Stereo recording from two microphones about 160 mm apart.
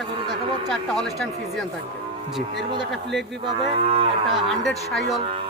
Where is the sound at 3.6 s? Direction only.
35° right (ahead or behind).